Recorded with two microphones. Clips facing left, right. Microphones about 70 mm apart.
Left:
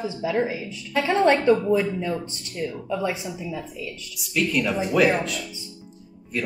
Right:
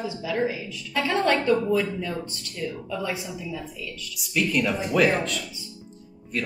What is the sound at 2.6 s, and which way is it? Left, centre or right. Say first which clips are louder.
Speech: left 4 dB; left.